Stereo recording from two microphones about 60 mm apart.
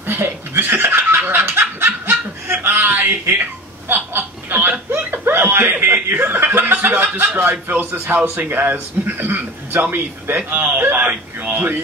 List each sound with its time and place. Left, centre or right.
0.0 s snicker: right
3.9 s a man's voice: right